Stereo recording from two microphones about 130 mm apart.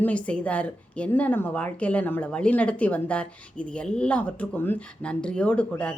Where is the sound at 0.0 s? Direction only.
10° left (ahead or behind).